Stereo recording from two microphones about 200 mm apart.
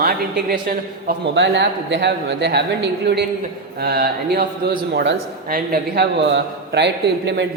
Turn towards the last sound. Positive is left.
turn(degrees=-60)  # may be behind; listen again after turning